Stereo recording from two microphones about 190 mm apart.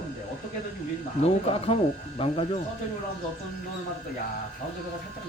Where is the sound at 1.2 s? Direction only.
30° left (ahead or behind).